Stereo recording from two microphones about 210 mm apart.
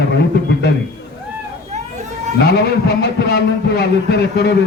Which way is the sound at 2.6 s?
50° left (ahead or behind).